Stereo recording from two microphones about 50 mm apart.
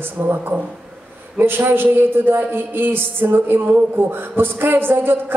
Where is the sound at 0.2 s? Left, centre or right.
Right.